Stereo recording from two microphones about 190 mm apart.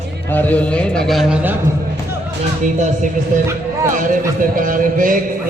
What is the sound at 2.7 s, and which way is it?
A man's voice, 40° right (ahead or behind).